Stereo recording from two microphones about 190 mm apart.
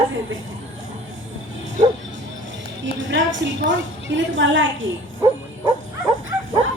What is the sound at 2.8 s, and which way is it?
A woman's voice, 75° right (ahead or behind).